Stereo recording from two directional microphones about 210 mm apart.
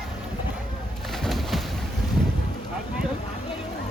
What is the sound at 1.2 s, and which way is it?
Bird, centre (ahead or behind).